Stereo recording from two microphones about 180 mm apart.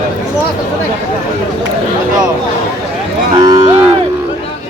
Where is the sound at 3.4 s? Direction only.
20° right (ahead or behind).